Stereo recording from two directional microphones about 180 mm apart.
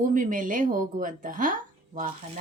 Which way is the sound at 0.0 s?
45° right (ahead or behind).